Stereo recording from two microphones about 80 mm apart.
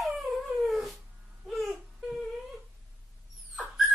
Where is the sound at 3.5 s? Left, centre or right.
Centre.